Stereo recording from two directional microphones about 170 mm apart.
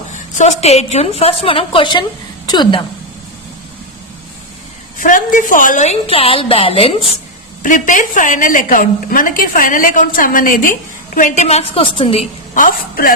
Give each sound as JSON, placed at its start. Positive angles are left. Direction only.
{"t": 0.1, "sound": "a woman's voice", "side_deg": 45}
{"t": 4.9, "sound": "a woman's voice", "side_deg": 50}
{"t": 7.6, "sound": "a woman's voice", "side_deg": 50}
{"t": 12.5, "sound": "a man's voice", "side_deg": 55}